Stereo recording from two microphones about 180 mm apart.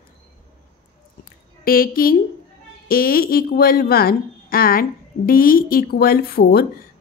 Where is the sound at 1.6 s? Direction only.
55° left (ahead or behind).